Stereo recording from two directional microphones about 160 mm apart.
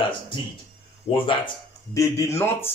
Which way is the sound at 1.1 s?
35° left (ahead or behind).